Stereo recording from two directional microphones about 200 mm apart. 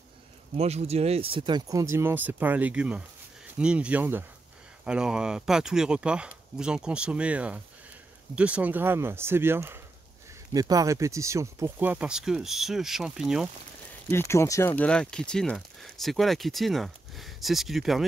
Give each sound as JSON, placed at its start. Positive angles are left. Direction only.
{"t": 0.6, "sound": "speech", "side_deg": -30}
{"t": 14.0, "sound": "speech", "side_deg": 15}